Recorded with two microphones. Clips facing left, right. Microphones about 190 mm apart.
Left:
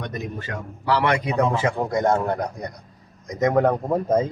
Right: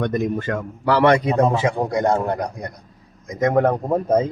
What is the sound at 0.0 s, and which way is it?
A man's voice, 50° right (ahead or behind).